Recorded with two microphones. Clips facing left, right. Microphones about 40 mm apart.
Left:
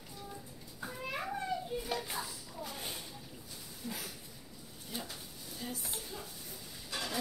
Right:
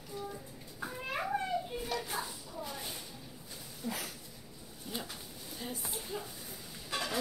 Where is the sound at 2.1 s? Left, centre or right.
Centre.